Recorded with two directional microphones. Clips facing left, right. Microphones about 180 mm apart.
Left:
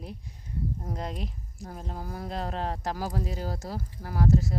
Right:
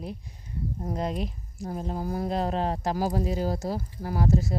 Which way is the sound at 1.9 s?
20° right (ahead or behind).